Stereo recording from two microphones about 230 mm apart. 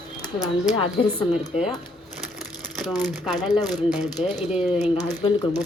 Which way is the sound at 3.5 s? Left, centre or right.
Centre.